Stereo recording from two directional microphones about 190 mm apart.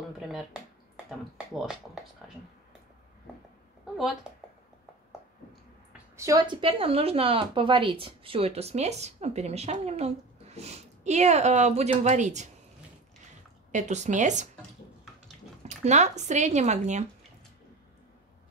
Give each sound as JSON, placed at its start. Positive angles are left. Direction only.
{"t": 0.2, "sound": "a sound", "side_deg": 0}
{"t": 1.5, "sound": "speech", "side_deg": 0}
{"t": 4.2, "sound": "speech", "side_deg": -5}
{"t": 6.1, "sound": "a woman's voice", "side_deg": -20}
{"t": 13.7, "sound": "a woman's voice", "side_deg": -40}
{"t": 15.6, "sound": "a woman's voice", "side_deg": -35}